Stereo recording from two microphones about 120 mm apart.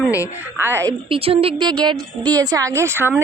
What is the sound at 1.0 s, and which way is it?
A woman's voice, 50° right (ahead or behind).